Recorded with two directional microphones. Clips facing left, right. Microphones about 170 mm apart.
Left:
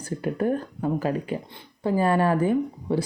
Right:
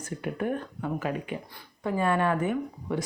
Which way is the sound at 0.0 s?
35° left (ahead or behind).